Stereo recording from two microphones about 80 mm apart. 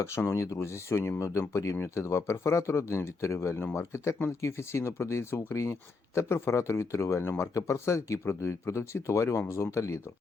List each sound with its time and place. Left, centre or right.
0.3 s speech: left